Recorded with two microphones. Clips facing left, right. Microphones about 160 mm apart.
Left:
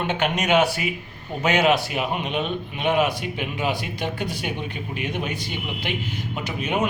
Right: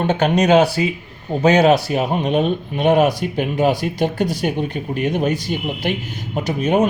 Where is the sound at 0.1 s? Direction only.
40° right (ahead or behind).